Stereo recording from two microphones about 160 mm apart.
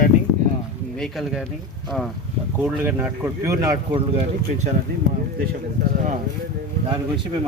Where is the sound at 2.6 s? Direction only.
10° right (ahead or behind).